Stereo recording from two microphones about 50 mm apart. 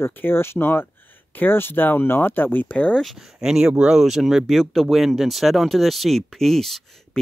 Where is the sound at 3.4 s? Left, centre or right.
Centre.